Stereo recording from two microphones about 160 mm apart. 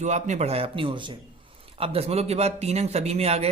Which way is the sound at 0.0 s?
45° right (ahead or behind).